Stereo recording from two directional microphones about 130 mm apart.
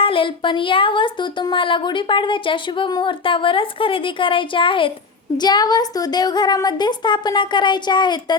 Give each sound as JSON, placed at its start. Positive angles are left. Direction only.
{"t": 0.0, "sound": "speech", "side_deg": 45}